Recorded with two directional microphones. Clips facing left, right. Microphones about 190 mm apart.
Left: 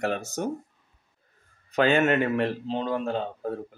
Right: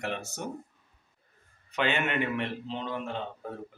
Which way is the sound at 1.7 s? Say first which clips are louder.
Left 8 dB; 40° left (ahead or behind).